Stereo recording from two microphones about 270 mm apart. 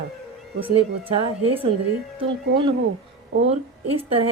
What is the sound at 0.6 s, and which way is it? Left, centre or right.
Speech, centre.